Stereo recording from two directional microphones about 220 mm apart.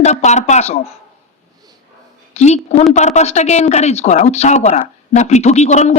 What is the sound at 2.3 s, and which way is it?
Speech, 30° left (ahead or behind).